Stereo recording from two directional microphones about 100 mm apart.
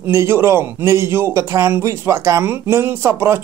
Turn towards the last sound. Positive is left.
turn(degrees=-25)  # may be behind; listen again after turning